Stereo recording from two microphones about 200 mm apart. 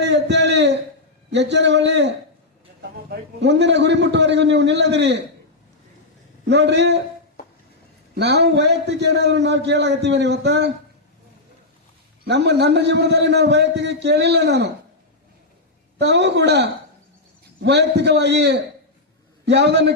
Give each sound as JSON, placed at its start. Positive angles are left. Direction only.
{"t": 0.0, "sound": "a sound", "side_deg": -60}
{"t": 1.3, "sound": "a man's voice", "side_deg": -60}
{"t": 6.4, "sound": "a man's voice", "side_deg": -60}
{"t": 8.1, "sound": "a man's voice", "side_deg": -55}
{"t": 12.2, "sound": "a man's voice", "side_deg": -55}
{"t": 16.0, "sound": "a man's voice", "side_deg": -60}